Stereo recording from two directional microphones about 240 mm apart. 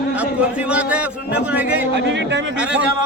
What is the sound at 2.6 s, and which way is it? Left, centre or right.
Speech, centre.